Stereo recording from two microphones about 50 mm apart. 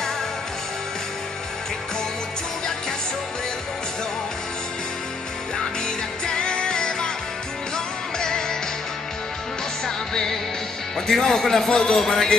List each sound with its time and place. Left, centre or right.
6.2 s music: centre
9.8 s music: centre
11.0 s a man's voice: centre